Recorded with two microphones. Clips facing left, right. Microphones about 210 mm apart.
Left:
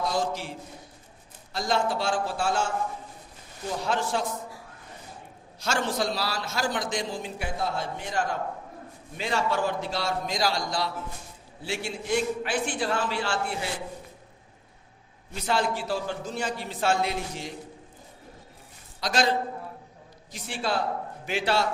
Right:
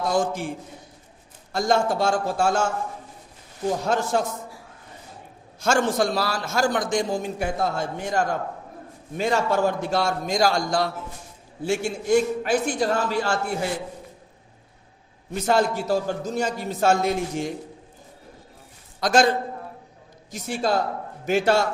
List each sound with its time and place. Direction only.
0.1 s a man's voice: 50° right (ahead or behind)
1.5 s a man's voice: 45° right (ahead or behind)
5.5 s a man's voice: 50° right (ahead or behind)
15.4 s a man's voice: 45° right (ahead or behind)
18.9 s a man's voice: 50° right (ahead or behind)